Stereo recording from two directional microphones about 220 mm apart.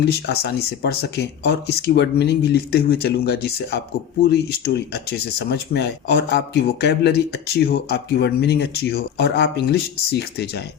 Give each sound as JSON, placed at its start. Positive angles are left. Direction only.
{"t": 0.0, "sound": "speech", "side_deg": 50}